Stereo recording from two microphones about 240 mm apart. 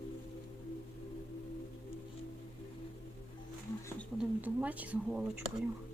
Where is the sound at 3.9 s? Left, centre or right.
Centre.